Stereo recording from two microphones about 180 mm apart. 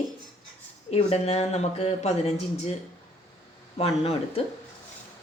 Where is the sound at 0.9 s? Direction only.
35° left (ahead or behind).